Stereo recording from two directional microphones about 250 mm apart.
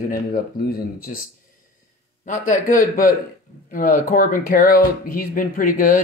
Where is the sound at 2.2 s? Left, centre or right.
Left.